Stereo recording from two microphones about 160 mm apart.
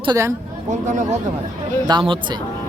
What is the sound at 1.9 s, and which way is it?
Speech, 30° right (ahead or behind).